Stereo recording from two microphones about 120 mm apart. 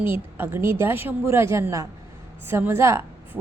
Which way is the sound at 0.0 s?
20° right (ahead or behind).